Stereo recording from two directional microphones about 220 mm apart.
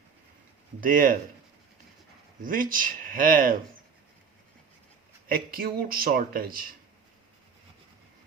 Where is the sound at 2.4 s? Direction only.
40° right (ahead or behind).